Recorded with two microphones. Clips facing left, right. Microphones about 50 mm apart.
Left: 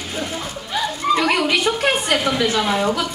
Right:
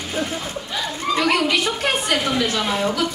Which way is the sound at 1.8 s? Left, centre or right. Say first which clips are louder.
Left 2 dB; centre.